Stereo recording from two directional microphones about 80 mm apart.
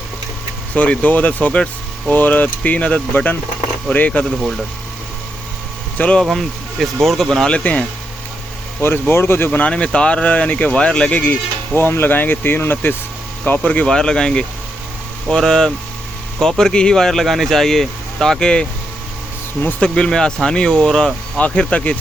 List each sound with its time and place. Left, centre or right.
0.7 s speech: centre
6.0 s speech: centre
6.2 s speech: centre
7.5 s speech: centre
8.8 s speech: left
9.5 s speech: centre
19.8 s speech: centre